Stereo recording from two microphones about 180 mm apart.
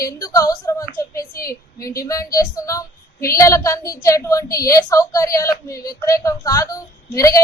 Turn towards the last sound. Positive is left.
turn(degrees=20)  # may be behind; listen again after turning